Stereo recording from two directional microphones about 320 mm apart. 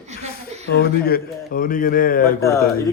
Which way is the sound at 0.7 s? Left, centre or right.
Left.